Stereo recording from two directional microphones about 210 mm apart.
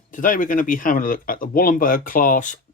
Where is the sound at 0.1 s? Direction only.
40° left (ahead or behind).